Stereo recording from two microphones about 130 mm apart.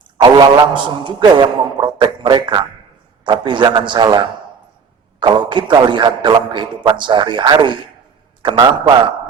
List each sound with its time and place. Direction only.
0.2 s a man's voice: 35° right (ahead or behind)